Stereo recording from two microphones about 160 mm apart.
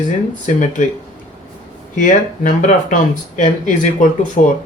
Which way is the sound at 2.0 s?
50° left (ahead or behind).